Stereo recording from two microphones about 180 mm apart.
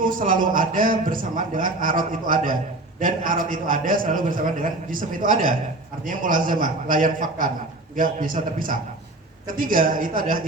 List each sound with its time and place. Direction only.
0.0 s a man's voice: 50° right (ahead or behind)